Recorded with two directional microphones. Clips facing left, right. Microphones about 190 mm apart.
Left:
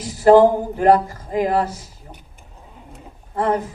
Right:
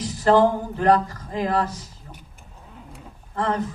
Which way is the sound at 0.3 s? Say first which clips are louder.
Left 4 dB; 40° left (ahead or behind).